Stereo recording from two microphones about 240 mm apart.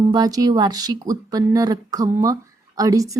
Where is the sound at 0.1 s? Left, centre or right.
Centre.